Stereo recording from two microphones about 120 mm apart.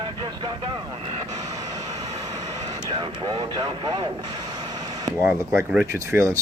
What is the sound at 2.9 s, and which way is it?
Speech, 45° right (ahead or behind).